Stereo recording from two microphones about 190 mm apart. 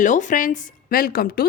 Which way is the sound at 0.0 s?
40° left (ahead or behind).